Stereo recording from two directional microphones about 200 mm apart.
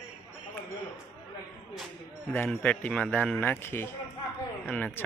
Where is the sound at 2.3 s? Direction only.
10° left (ahead or behind).